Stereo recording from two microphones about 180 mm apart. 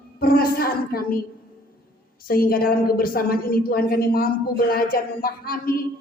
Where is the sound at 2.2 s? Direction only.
55° left (ahead or behind).